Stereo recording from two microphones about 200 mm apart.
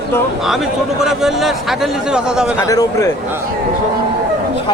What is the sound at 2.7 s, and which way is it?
Speech, 15° left (ahead or behind).